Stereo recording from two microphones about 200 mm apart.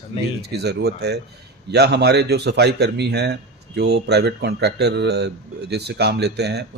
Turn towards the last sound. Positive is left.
turn(degrees=-55)  # may be behind; listen again after turning